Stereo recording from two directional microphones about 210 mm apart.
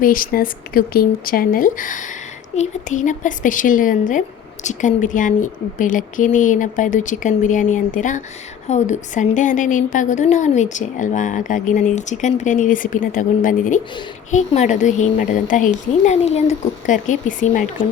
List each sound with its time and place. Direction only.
0.0 s a woman's voice: 40° left (ahead or behind)